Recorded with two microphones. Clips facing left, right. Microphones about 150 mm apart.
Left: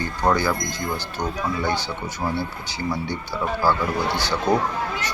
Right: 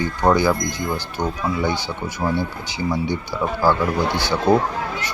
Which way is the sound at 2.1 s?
15° right (ahead or behind).